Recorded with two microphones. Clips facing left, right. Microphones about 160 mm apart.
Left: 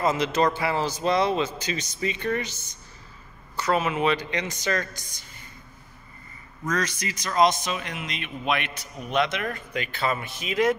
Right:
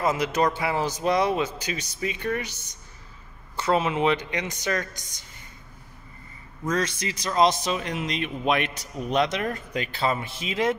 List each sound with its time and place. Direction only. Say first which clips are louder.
0.0 s a man's voice: left 1 dB; 10° right (ahead or behind)
3.5 s a man's voice: right 1 dB; 25° right (ahead or behind)
6.6 s a man's voice: right 2 dB; 25° right (ahead or behind)